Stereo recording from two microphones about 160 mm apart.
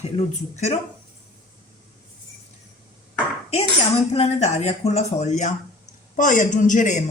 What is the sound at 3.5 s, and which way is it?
A woman's voice, 40° left (ahead or behind).